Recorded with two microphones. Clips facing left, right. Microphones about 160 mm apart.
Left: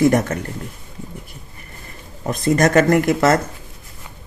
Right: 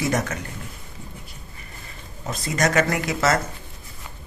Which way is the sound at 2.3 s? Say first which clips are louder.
Left 7 dB; 50° left (ahead or behind).